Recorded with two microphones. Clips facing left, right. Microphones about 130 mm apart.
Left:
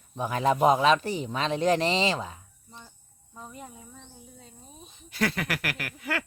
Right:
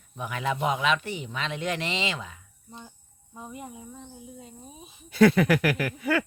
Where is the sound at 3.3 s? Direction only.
10° right (ahead or behind).